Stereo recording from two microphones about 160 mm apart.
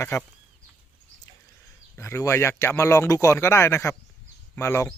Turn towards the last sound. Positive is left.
turn(degrees=15)  # may be behind; listen again after turning